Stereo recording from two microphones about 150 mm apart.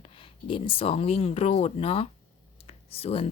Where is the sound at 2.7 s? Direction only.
40° left (ahead or behind).